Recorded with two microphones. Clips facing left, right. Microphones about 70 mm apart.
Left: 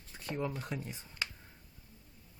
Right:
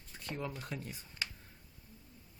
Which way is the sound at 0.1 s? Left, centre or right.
Centre.